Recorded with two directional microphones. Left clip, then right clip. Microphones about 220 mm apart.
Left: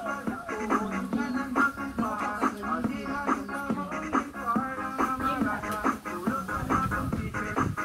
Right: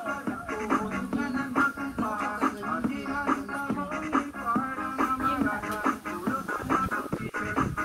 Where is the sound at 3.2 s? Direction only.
45° right (ahead or behind).